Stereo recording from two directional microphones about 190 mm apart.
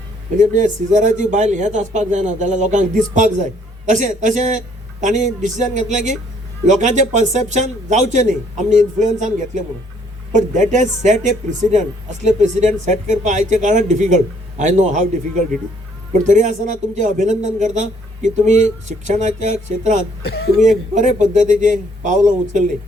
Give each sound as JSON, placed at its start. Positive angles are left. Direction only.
{"t": 0.3, "sound": "speech", "side_deg": -40}
{"t": 20.7, "sound": "speech", "side_deg": -40}